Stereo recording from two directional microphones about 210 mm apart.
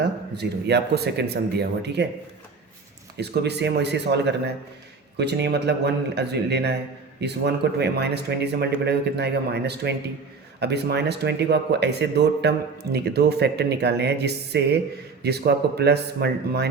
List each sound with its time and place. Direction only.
0.0 s speech: 50° right (ahead or behind)
3.2 s speech: 50° right (ahead or behind)